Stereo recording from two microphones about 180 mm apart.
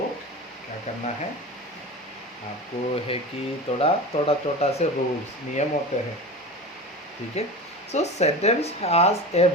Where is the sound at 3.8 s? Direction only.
35° left (ahead or behind).